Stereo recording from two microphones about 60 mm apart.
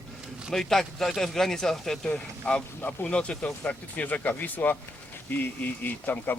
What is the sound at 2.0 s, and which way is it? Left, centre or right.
Speech, centre.